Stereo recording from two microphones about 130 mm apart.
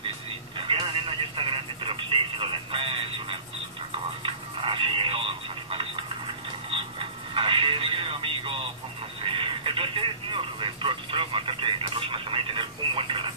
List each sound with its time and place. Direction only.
0.6 s telephone: 45° right (ahead or behind)
4.2 s a sound: 45° right (ahead or behind)
6.7 s music: 45° right (ahead or behind)
9.2 s telephone: 40° right (ahead or behind)